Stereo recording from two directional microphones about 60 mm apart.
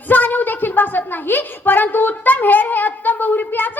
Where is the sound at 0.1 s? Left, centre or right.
Left.